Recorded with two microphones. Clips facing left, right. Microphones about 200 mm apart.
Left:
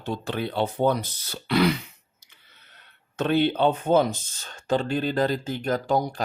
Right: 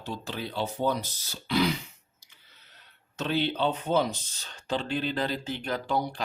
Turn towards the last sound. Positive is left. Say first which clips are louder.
# left 5 dB
turn(degrees=45)  # may be behind; listen again after turning